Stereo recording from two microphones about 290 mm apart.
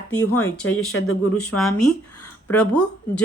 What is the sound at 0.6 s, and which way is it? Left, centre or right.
Speech, left.